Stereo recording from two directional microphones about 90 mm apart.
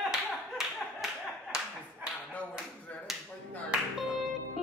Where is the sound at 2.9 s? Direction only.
15° left (ahead or behind).